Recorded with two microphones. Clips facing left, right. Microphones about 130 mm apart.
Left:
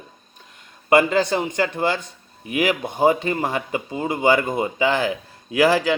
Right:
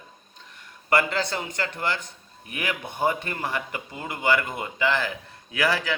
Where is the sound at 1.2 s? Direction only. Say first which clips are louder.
Left 8 dB; 20° left (ahead or behind).